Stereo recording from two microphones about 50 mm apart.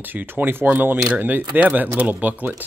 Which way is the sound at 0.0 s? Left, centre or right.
Right.